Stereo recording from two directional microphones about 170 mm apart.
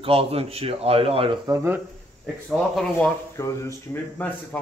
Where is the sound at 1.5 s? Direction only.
15° right (ahead or behind).